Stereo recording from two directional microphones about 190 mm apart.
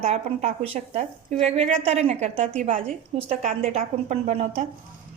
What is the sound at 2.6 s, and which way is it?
Speech, 40° right (ahead or behind).